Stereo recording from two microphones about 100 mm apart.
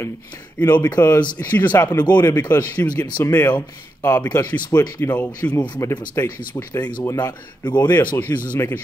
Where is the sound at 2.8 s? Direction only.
45° left (ahead or behind).